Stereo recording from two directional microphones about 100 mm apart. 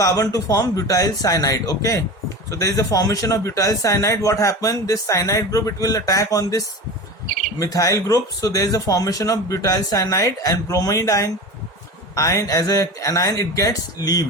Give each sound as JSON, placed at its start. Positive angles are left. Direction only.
{"t": 0.0, "sound": "a man's voice", "side_deg": 35}
{"t": 7.6, "sound": "a man's voice", "side_deg": 35}